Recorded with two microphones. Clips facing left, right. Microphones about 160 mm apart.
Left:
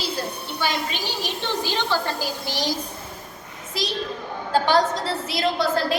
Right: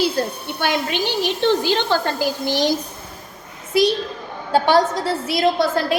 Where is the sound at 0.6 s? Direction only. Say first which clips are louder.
Right 5 dB; 65° right (ahead or behind).